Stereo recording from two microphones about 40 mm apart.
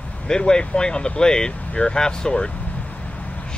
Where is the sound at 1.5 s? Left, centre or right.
Left.